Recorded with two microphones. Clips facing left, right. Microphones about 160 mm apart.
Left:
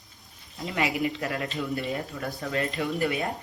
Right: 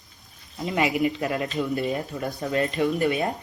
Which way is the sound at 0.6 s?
20° right (ahead or behind).